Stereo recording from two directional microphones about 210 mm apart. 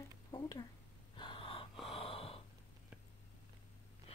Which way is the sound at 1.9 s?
25° left (ahead or behind).